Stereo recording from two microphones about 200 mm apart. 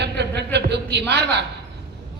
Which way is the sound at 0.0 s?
55° right (ahead or behind).